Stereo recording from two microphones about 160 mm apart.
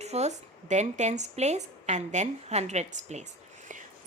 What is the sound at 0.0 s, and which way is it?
A woman's voice, 45° right (ahead or behind).